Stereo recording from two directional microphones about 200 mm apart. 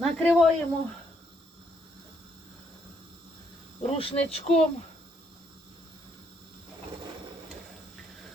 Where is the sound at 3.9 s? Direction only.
30° left (ahead or behind).